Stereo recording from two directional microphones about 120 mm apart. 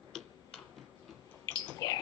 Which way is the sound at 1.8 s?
30° left (ahead or behind).